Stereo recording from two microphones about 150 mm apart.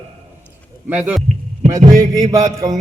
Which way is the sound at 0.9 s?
10° right (ahead or behind).